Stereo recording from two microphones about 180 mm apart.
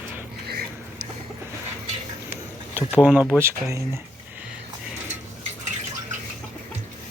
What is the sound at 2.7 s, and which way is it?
Speech, 5° right (ahead or behind).